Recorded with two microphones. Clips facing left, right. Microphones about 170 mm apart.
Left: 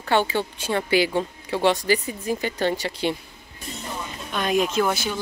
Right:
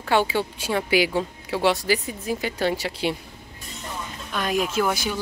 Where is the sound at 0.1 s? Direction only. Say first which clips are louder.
Even; 10° right (ahead or behind).